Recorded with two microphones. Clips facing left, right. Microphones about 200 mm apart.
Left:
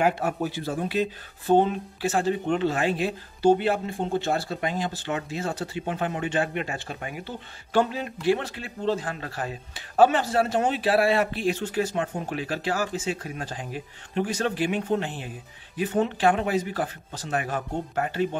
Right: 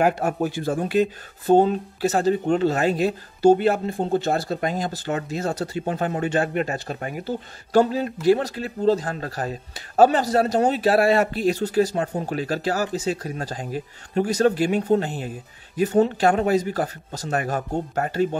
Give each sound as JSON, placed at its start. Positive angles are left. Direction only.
{"t": 0.0, "sound": "speech", "side_deg": -45}